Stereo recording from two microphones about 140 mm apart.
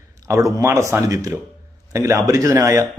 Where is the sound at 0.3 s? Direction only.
20° right (ahead or behind).